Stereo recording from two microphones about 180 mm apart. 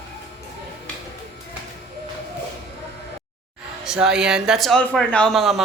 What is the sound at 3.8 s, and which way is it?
Speech, 5° right (ahead or behind).